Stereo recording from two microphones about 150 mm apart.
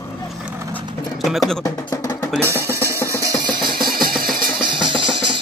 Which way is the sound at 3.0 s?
20° right (ahead or behind).